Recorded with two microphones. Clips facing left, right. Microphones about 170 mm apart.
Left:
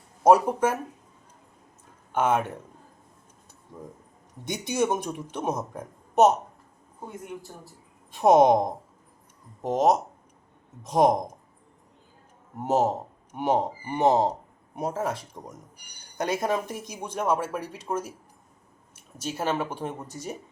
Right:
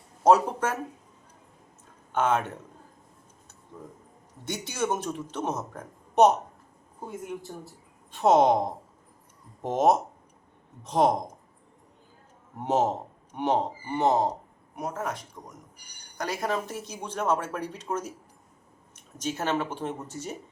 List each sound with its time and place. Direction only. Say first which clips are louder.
0.2 s speech: left 2 dB; 10° left (ahead or behind)
2.1 s speech: left 1 dB; 10° left (ahead or behind)
4.4 s speech: left 4 dB; 15° left (ahead or behind)
7.5 s speech: right 5 dB; centre (ahead or behind)
8.1 s speech: left 3 dB; 15° left (ahead or behind)
9.6 s speech: left 1 dB; centre (ahead or behind)
10.8 s speech: left 2 dB; 10° left (ahead or behind)
12.6 s speech: left 1 dB; 5° left (ahead or behind)
14.8 s speech: left 4 dB; 30° left (ahead or behind); by 20.3 s 10° left (ahead or behind)